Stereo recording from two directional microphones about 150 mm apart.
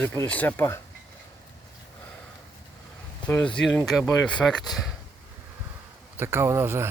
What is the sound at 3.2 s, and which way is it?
Speech, 10° left (ahead or behind).